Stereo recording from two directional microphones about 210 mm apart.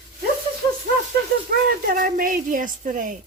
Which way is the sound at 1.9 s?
40° right (ahead or behind).